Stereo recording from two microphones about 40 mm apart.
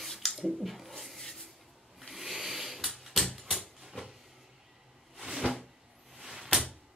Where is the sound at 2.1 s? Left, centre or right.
Centre.